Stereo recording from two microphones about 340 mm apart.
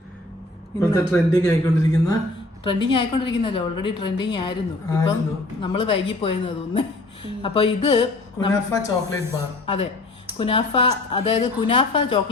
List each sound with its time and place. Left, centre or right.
0.8 s a woman's voice: centre